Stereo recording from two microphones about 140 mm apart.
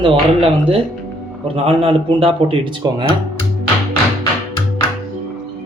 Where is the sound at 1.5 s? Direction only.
40° right (ahead or behind).